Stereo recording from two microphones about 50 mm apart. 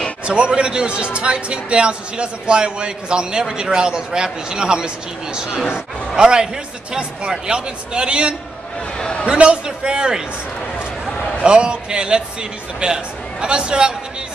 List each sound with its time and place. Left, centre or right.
0.2 s speech: centre
8.9 s a man's voice: centre
9.2 s speech: centre
11.4 s speech: centre